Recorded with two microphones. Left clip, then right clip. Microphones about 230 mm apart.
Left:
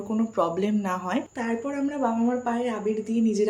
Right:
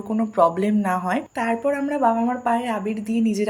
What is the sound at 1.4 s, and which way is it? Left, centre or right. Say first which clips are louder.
A woman's voice: right 7 dB; right.